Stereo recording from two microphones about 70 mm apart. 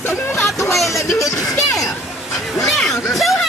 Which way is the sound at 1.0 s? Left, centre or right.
Left.